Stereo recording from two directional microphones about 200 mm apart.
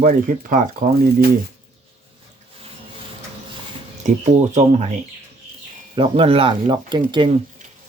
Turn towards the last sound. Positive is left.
turn(degrees=-25)  # may be behind; listen again after turning